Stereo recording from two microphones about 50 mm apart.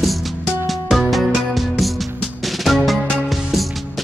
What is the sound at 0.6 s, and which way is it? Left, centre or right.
Music, centre.